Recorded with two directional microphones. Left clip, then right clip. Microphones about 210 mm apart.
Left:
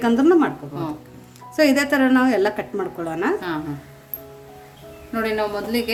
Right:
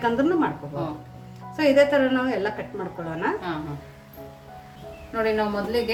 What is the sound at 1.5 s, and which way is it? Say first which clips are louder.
Speech: left 1 dB; 55° left (ahead or behind).